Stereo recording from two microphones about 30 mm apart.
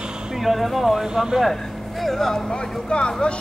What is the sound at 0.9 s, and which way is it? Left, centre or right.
Speech, centre.